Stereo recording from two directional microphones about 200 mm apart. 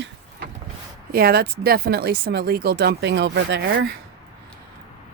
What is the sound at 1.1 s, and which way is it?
Speech, 50° right (ahead or behind).